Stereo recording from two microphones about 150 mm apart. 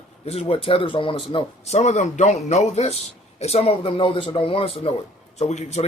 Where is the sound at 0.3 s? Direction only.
40° left (ahead or behind).